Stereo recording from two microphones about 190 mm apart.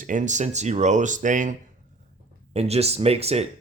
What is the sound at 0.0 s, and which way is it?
Speech, 40° right (ahead or behind).